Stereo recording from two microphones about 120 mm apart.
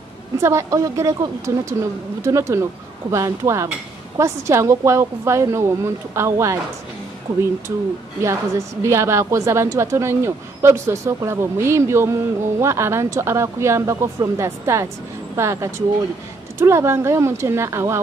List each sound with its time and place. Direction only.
0.4 s a woman's voice: 25° right (ahead or behind)
8.2 s a woman's voice: 25° right (ahead or behind)